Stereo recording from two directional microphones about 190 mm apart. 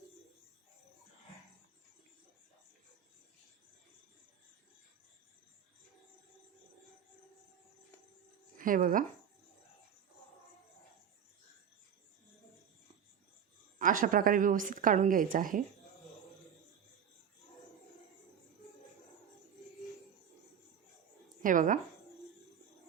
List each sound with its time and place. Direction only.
8.5 s speech: 45° right (ahead or behind)
13.7 s a woman's voice: 45° right (ahead or behind)
21.4 s speech: 45° right (ahead or behind)